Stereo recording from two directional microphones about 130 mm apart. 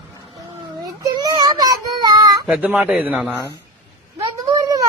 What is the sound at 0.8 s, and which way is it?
Child singing, 30° right (ahead or behind).